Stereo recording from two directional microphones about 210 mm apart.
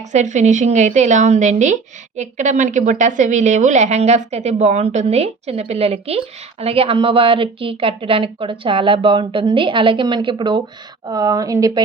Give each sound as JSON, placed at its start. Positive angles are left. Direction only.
{"t": 0.1, "sound": "speech", "side_deg": -35}